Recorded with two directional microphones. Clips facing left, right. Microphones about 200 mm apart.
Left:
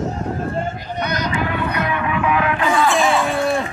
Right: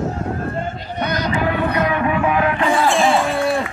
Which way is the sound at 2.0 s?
35° right (ahead or behind).